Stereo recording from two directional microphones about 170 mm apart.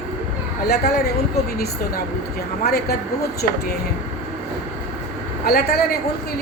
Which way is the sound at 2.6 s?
65° left (ahead or behind).